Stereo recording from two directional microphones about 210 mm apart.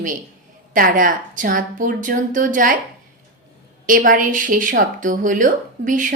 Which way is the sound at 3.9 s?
40° right (ahead or behind).